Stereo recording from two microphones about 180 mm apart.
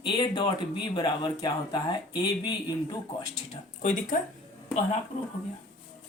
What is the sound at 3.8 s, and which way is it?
Speech, 45° left (ahead or behind).